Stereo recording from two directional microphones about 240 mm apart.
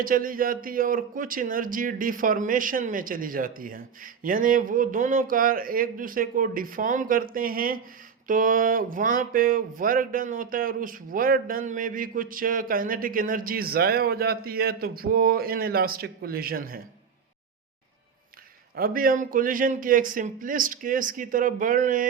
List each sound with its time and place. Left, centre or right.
0.0 s speech: right
18.8 s speech: right